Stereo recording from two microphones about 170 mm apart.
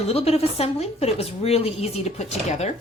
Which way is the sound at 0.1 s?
35° left (ahead or behind).